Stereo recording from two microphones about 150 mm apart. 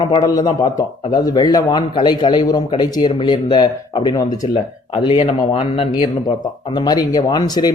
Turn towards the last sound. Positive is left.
turn(degrees=25)  # may be behind; listen again after turning